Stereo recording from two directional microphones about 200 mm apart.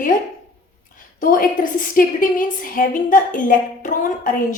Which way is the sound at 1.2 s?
45° left (ahead or behind).